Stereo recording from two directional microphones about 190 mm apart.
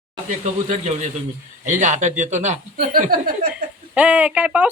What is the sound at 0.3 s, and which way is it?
Speech, 40° right (ahead or behind).